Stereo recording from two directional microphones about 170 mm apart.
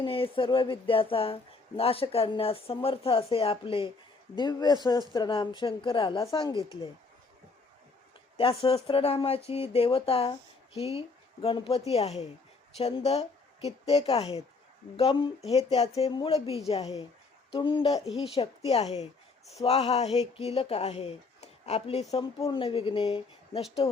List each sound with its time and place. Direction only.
0.0 s a man's voice: 30° left (ahead or behind)
8.4 s a man's voice: 35° left (ahead or behind)